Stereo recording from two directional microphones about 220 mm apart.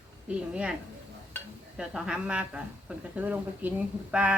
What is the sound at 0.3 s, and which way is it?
Speech, 5° right (ahead or behind).